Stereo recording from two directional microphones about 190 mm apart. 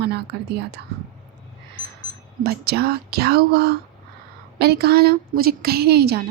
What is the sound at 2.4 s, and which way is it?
A woman's voice, 55° right (ahead or behind).